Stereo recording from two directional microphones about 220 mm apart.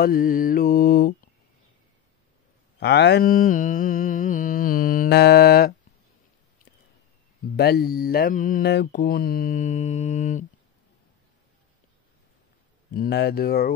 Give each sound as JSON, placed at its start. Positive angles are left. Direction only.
{"t": 0.0, "sound": "mantra", "side_deg": 40}
{"t": 2.8, "sound": "mantra", "side_deg": 50}
{"t": 7.5, "sound": "mantra", "side_deg": 45}
{"t": 12.9, "sound": "speech", "side_deg": 45}